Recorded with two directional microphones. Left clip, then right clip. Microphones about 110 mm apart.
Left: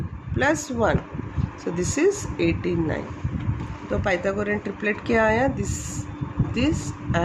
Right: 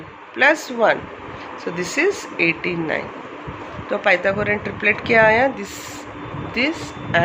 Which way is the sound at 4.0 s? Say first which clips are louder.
Right 7 dB; 45° left (ahead or behind).